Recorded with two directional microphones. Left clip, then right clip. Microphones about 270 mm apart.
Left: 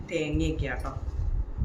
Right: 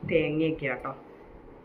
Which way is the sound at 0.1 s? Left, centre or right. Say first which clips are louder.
Right 4 dB; left.